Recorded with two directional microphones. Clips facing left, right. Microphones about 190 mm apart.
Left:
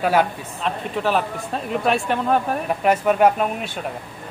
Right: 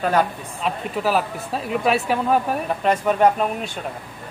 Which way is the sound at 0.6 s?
5° right (ahead or behind).